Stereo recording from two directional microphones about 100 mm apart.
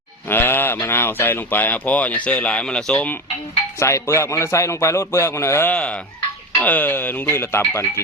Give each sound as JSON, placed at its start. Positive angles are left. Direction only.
{"t": 0.3, "sound": "speech", "side_deg": 20}
{"t": 3.8, "sound": "a man's voice", "side_deg": 30}
{"t": 5.7, "sound": "a man's voice", "side_deg": 10}